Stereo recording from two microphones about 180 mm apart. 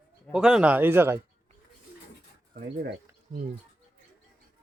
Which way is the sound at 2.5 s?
50° right (ahead or behind).